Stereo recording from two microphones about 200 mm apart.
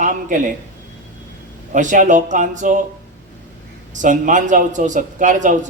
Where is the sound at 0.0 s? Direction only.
40° right (ahead or behind).